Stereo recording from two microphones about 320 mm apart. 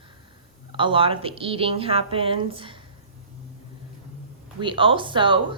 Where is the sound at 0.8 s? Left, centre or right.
Centre.